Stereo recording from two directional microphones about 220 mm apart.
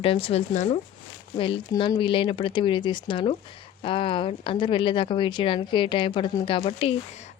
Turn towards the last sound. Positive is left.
turn(degrees=25)  # may be behind; listen again after turning